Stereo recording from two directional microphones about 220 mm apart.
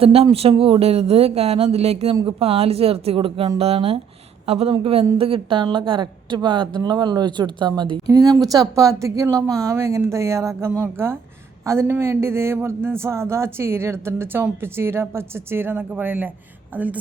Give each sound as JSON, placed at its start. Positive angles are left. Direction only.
{"t": 0.0, "sound": "a woman's voice", "side_deg": -25}